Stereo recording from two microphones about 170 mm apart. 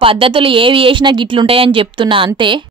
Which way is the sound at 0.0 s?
30° right (ahead or behind).